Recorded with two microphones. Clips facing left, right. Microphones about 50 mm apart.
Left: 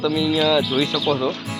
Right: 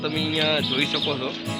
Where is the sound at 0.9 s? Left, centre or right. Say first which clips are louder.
Left 6 dB; left.